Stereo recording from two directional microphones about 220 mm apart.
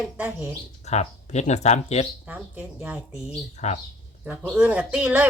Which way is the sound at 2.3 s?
5° right (ahead or behind).